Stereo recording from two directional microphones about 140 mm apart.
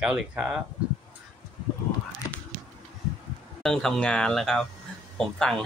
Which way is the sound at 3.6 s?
5° left (ahead or behind).